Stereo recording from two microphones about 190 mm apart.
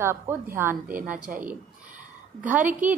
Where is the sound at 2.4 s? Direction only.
10° right (ahead or behind).